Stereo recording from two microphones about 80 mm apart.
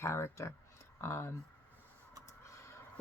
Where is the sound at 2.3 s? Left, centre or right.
Left.